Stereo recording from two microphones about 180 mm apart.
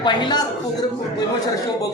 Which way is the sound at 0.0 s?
25° left (ahead or behind).